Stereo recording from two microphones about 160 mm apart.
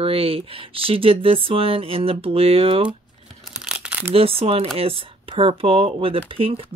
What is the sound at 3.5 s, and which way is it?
Tearing, 5° right (ahead or behind).